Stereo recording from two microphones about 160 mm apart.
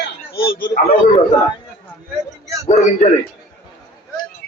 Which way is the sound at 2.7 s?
45° left (ahead or behind).